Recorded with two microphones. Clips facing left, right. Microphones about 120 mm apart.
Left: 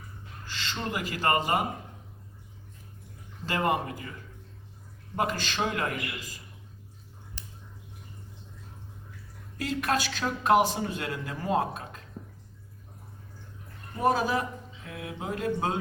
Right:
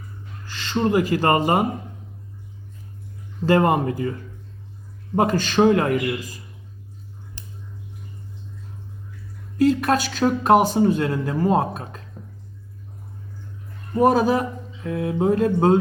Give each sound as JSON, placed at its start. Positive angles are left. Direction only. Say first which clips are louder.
{"t": 0.5, "sound": "speech", "louder": "right 13 dB", "side_deg": -45}
{"t": 3.4, "sound": "speech", "louder": "right 10 dB", "side_deg": -45}
{"t": 5.1, "sound": "speech", "louder": "right 11 dB", "side_deg": -45}
{"t": 9.6, "sound": "speech", "louder": "right 10 dB", "side_deg": -35}
{"t": 14.0, "sound": "speech", "louder": "right 8 dB", "side_deg": -35}